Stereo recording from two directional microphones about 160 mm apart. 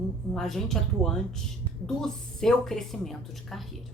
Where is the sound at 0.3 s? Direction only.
Centre (ahead or behind).